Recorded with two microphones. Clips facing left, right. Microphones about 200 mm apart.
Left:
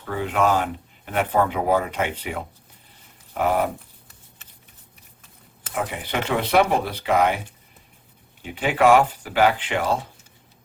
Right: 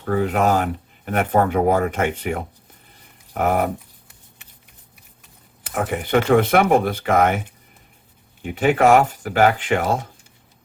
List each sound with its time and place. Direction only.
0.0 s speech: 45° right (ahead or behind)
5.7 s speech: 50° right (ahead or behind)
8.4 s speech: 45° right (ahead or behind)